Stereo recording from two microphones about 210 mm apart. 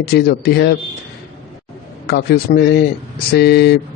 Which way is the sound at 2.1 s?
50° left (ahead or behind).